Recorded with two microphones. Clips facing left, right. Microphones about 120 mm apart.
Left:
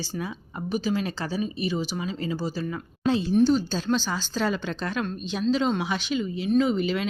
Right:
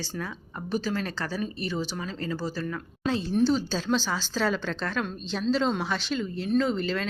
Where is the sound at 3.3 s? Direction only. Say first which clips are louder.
Left 2 dB; 5° left (ahead or behind).